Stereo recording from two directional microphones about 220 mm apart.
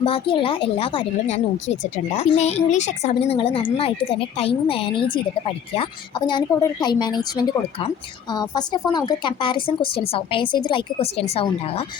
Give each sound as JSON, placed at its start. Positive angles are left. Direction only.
{"t": 0.0, "sound": "a woman's voice", "side_deg": 25}